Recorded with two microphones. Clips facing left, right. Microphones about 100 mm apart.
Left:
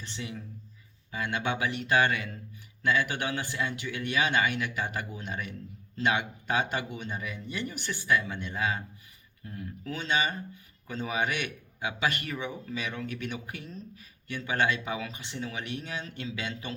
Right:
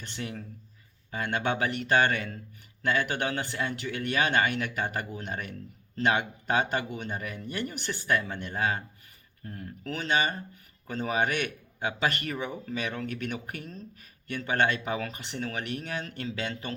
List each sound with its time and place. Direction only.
0.2 s speech: 50° right (ahead or behind)